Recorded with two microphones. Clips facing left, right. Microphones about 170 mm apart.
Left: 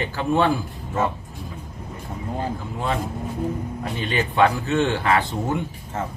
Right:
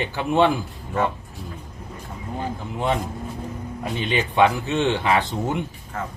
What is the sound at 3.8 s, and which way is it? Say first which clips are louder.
Speech: right 2 dB; 15° right (ahead or behind).